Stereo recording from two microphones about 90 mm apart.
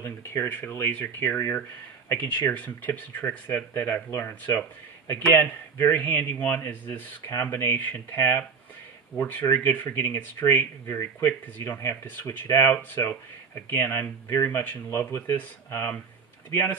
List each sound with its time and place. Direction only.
0.0 s a man's voice: 30° left (ahead or behind)